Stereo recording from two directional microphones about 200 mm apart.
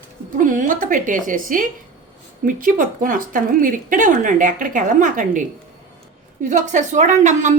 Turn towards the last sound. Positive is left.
turn(degrees=-35)  # may be behind; listen again after turning